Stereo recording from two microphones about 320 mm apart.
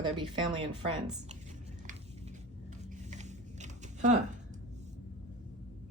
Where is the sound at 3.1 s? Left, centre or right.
Right.